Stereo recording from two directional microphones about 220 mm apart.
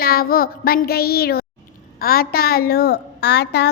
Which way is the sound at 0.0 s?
45° left (ahead or behind).